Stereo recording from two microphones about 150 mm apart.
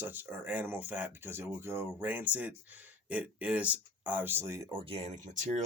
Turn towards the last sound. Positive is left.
turn(degrees=-55)  # may be behind; listen again after turning